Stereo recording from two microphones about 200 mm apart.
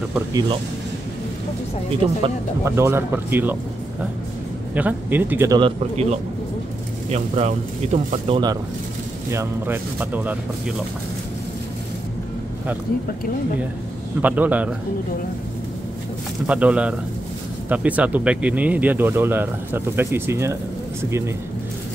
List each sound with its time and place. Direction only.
0.1 s speech: 20° right (ahead or behind)
2.6 s speech: 10° right (ahead or behind)
4.7 s speech: 10° right (ahead or behind)
5.6 s speech: 30° right (ahead or behind)
9.3 s speech: 10° right (ahead or behind)
14.2 s speech: 10° right (ahead or behind)
16.4 s speech: 5° right (ahead or behind)